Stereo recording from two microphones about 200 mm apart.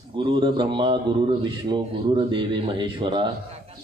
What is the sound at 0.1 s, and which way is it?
A man's voice, 25° right (ahead or behind).